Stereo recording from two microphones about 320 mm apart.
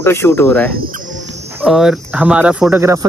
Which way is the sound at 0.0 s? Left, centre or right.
Centre.